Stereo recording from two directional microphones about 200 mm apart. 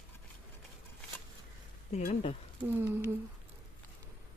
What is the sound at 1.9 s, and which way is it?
Speech, 35° left (ahead or behind).